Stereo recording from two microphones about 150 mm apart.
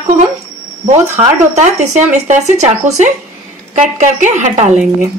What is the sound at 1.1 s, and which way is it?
Speech, 50° right (ahead or behind).